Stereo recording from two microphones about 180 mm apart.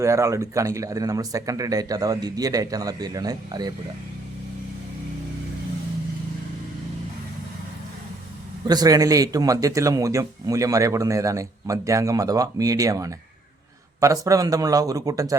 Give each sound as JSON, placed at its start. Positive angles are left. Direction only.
{"t": 0.0, "sound": "speech", "side_deg": -15}
{"t": 8.6, "sound": "speech", "side_deg": -20}